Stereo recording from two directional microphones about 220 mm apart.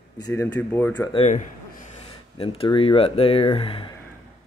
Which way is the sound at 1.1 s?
30° left (ahead or behind).